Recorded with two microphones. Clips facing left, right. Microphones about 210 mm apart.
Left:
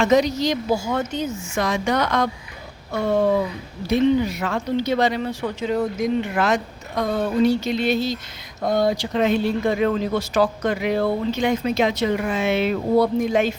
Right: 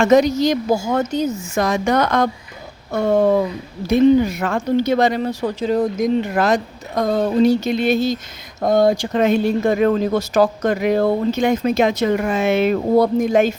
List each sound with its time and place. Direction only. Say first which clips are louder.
0.0 s speech: right 4 dB; 50° right (ahead or behind)